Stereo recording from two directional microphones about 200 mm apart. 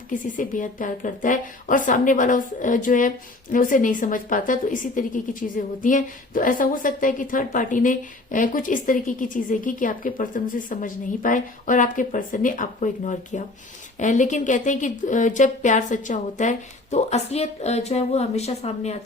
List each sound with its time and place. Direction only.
0.1 s a woman's voice: 40° left (ahead or behind)